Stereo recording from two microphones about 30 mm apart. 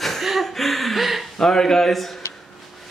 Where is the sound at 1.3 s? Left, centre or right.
Centre.